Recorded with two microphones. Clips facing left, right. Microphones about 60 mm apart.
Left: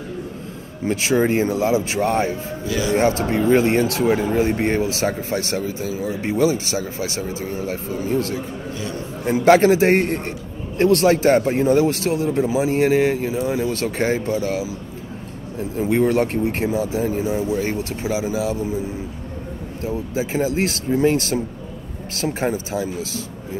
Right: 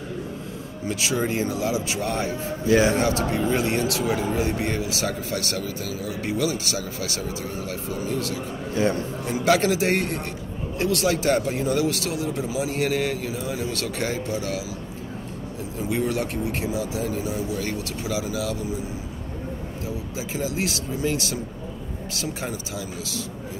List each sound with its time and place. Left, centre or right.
0.8 s speech: left
2.6 s a man's voice: right
3.0 s speech: left
15.8 s speech: left
19.9 s speech: left